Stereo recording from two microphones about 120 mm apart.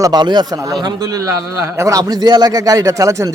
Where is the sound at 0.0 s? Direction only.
35° right (ahead or behind).